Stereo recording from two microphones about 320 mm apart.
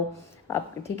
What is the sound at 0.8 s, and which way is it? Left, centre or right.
Speech, centre.